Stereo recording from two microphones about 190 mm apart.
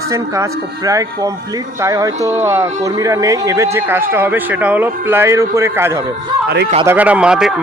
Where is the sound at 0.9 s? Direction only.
15° right (ahead or behind).